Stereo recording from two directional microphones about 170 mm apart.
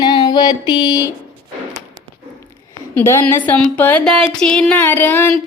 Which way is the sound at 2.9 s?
15° left (ahead or behind).